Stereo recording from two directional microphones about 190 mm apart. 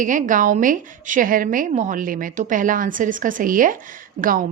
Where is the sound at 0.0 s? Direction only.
45° right (ahead or behind).